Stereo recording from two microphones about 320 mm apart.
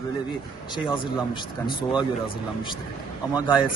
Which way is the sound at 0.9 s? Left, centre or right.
Centre.